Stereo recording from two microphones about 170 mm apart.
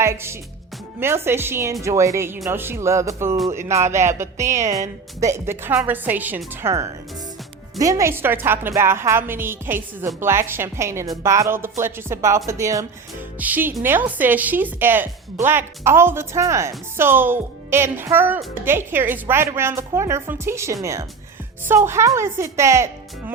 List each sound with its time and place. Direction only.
0.0 s a woman's voice: 15° right (ahead or behind)